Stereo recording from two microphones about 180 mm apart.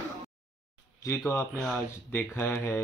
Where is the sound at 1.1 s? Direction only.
15° left (ahead or behind).